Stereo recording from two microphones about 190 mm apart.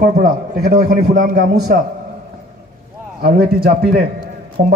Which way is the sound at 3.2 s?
55° right (ahead or behind).